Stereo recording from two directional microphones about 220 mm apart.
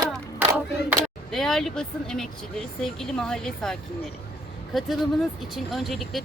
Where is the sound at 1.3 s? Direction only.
Centre (ahead or behind).